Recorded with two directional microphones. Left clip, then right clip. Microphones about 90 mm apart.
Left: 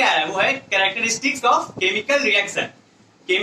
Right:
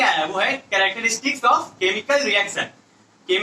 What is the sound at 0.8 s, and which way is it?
A man's voice, 35° left (ahead or behind).